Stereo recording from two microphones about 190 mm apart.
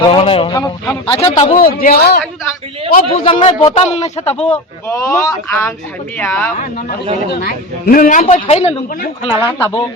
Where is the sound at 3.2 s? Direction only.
25° left (ahead or behind).